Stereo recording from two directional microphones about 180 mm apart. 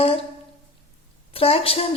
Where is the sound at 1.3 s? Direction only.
30° left (ahead or behind).